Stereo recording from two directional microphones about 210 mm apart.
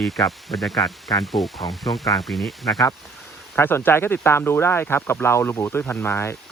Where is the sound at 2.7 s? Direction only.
15° left (ahead or behind).